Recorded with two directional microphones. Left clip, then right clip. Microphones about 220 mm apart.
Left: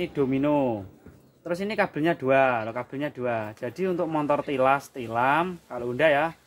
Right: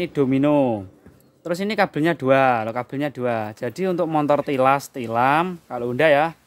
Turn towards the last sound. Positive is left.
turn(degrees=-45)  # may be behind; listen again after turning